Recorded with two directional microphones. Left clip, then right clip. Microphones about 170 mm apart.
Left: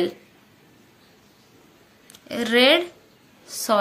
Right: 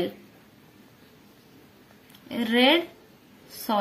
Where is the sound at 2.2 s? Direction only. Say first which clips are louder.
Left 4 dB; 25° left (ahead or behind).